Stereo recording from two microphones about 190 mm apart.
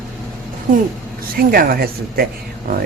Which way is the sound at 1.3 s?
50° right (ahead or behind).